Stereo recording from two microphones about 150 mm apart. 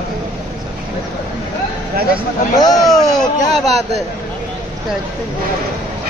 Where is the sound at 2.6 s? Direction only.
25° left (ahead or behind).